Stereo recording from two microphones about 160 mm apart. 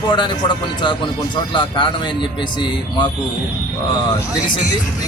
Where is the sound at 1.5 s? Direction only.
30° left (ahead or behind).